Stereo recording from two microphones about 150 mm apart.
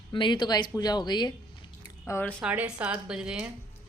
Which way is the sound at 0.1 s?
30° left (ahead or behind).